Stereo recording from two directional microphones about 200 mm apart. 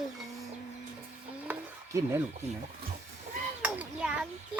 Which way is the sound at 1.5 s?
15° right (ahead or behind).